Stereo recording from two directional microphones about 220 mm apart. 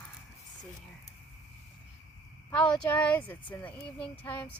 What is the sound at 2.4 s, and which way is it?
Speech, 5° left (ahead or behind).